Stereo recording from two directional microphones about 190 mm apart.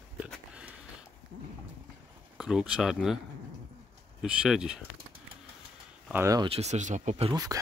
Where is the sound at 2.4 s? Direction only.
5° right (ahead or behind).